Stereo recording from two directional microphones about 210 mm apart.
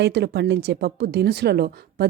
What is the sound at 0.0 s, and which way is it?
A woman's voice, 55° right (ahead or behind).